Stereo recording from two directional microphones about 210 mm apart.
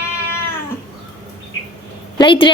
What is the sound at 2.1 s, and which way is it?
Speech, 25° left (ahead or behind).